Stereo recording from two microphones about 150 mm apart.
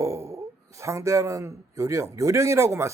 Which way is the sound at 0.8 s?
20° right (ahead or behind).